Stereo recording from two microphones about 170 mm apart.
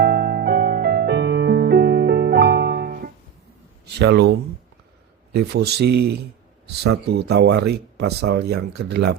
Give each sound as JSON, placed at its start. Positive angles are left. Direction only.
{"t": 0.0, "sound": "music", "side_deg": -65}
{"t": 3.9, "sound": "speech", "side_deg": -75}